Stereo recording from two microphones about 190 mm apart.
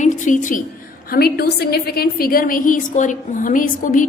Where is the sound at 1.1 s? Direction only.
55° left (ahead or behind).